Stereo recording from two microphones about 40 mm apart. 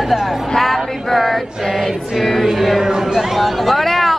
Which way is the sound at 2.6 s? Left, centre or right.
Centre.